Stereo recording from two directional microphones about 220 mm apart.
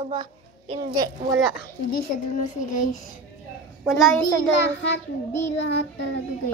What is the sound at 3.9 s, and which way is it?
Speech, centre (ahead or behind).